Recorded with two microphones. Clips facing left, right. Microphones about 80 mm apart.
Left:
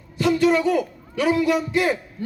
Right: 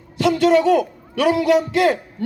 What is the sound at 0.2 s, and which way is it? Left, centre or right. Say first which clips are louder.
A man's voice: right 3 dB; right.